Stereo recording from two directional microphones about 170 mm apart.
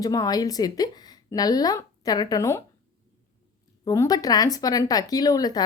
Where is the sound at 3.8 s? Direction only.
20° left (ahead or behind).